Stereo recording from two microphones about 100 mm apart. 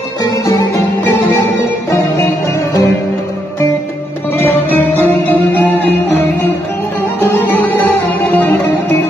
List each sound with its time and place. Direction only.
0.2 s music: 40° left (ahead or behind)
1.0 s music: 25° left (ahead or behind)
4.4 s music: 20° left (ahead or behind)